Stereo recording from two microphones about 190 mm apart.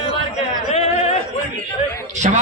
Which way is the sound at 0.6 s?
35° left (ahead or behind).